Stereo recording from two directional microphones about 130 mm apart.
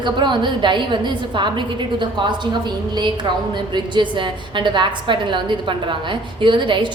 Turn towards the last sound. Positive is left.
turn(degrees=-40)  # may be behind; listen again after turning